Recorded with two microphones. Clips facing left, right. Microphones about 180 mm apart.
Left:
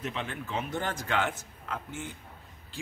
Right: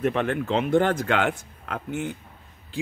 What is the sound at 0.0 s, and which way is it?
A man's voice, 60° right (ahead or behind).